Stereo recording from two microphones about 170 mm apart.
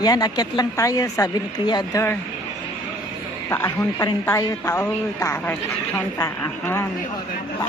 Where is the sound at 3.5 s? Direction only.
15° left (ahead or behind).